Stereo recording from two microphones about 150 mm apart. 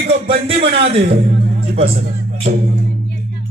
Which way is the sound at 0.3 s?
40° right (ahead or behind).